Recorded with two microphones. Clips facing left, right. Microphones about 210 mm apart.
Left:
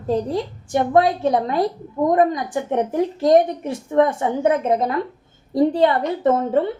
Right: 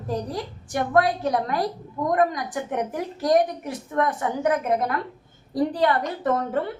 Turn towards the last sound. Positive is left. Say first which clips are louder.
# left 6 dB
turn(degrees=25)  # may be behind; listen again after turning